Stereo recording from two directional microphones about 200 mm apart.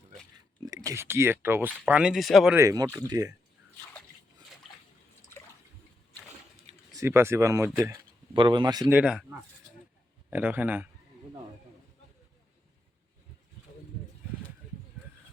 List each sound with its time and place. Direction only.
0.6 s speech: 20° right (ahead or behind); by 2.6 s centre (ahead or behind)
2.6 s speech: 15° right (ahead or behind)
6.9 s speech: 15° right (ahead or behind)
9.0 s speech: 5° right (ahead or behind)